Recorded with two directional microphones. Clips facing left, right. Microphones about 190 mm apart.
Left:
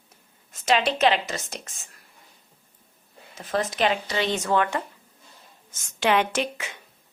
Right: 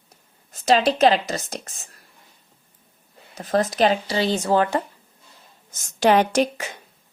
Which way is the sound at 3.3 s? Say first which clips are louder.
Right 5 dB; 40° right (ahead or behind).